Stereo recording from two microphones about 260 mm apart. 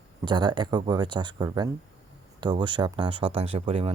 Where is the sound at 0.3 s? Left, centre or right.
Centre.